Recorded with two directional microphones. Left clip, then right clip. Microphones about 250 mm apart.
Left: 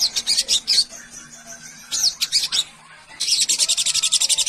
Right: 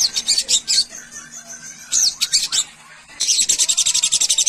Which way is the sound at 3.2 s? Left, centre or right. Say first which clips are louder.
Right 1 dB; centre.